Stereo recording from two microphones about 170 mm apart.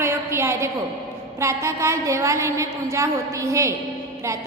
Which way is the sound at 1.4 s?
15° right (ahead or behind).